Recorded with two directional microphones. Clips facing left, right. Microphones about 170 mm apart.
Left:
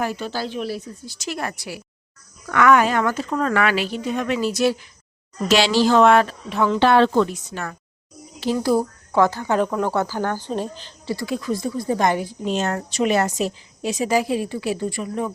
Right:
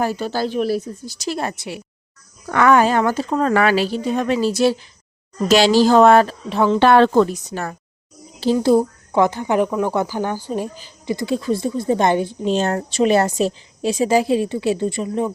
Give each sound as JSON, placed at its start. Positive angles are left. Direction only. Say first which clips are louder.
{"t": 0.0, "sound": "a woman's voice", "louder": "right 4 dB", "side_deg": -35}
{"t": 5.5, "sound": "a woman's voice", "louder": "right 4 dB", "side_deg": -40}
{"t": 6.7, "sound": "a woman's voice", "louder": "right 3 dB", "side_deg": -50}